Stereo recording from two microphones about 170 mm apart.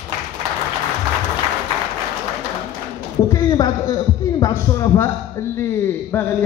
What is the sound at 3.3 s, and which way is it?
A man's voice, 20° left (ahead or behind).